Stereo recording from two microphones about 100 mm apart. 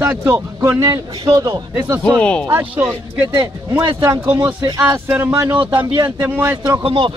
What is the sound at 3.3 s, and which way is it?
Speech, 30° right (ahead or behind).